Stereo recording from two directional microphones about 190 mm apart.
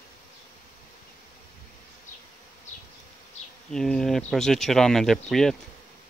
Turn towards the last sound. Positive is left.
turn(degrees=0)  # may be behind; listen again after turning